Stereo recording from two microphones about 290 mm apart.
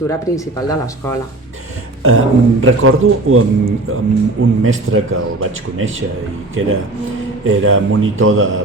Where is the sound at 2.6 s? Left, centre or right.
Right.